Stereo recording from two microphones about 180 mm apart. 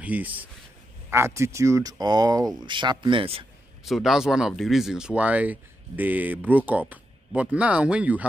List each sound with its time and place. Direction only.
0.0 s speech: 10° right (ahead or behind); by 3.4 s 30° right (ahead or behind)
3.8 s speech: centre (ahead or behind)